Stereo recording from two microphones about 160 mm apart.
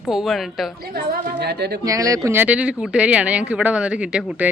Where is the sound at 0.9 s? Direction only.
90° right.